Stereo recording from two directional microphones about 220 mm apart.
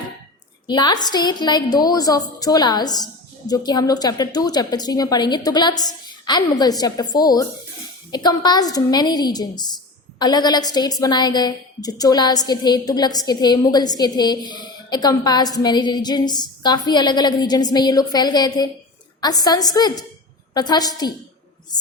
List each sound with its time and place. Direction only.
0.7 s a woman's voice: 20° left (ahead or behind)